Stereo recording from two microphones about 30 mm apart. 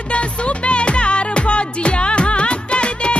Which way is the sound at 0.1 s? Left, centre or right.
Left.